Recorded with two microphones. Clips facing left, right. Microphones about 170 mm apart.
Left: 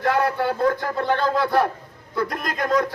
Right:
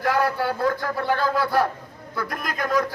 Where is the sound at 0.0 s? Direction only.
25° left (ahead or behind).